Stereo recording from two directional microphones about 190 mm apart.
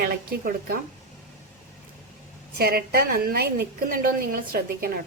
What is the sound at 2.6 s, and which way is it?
Speech, 55° right (ahead or behind).